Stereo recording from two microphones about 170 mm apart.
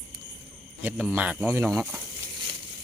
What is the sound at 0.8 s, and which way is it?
Speech, 5° right (ahead or behind).